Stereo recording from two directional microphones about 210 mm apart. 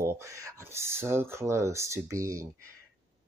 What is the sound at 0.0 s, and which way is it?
Speech, 15° right (ahead or behind).